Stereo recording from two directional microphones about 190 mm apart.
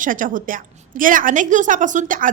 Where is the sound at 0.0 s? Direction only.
45° right (ahead or behind).